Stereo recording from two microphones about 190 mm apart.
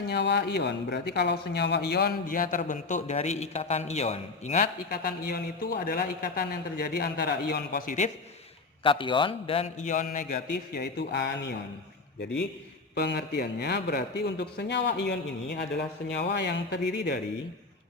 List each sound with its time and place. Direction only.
0.1 s speech: 65° left (ahead or behind); by 4.7 s 40° left (ahead or behind)
4.9 s speech: 55° left (ahead or behind)
8.8 s a man's voice: 25° left (ahead or behind)
9.9 s speech: 40° left (ahead or behind)
10.8 s speech: 60° left (ahead or behind)
12.9 s speech: 60° left (ahead or behind)